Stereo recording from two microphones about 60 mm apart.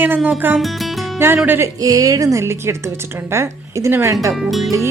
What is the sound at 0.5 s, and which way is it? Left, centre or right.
Music, centre.